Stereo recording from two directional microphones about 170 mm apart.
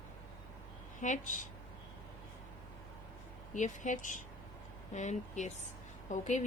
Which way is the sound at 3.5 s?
45° left (ahead or behind).